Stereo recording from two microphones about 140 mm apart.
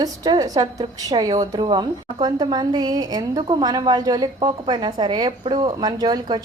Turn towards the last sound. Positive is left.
turn(degrees=-30)  # may be behind; listen again after turning